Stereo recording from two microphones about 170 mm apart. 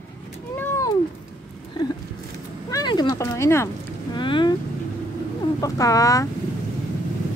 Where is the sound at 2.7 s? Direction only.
25° left (ahead or behind).